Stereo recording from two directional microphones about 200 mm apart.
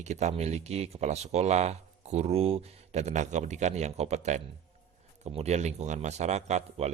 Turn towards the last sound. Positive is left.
turn(degrees=-35)  # may be behind; listen again after turning